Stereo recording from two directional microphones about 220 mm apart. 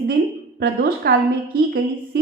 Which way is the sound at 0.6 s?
45° right (ahead or behind).